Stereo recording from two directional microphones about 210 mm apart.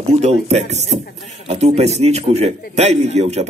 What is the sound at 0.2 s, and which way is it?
Speech, 30° right (ahead or behind).